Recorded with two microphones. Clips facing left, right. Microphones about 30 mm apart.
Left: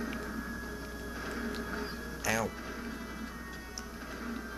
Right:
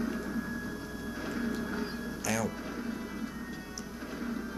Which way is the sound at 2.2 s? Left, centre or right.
Centre.